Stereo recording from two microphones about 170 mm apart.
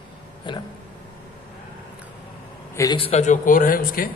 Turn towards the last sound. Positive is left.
turn(degrees=55)  # may be behind; listen again after turning